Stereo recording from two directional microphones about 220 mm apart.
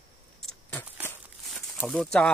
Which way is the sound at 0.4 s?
5° left (ahead or behind).